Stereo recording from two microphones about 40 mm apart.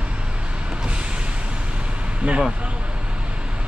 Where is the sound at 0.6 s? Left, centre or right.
Right.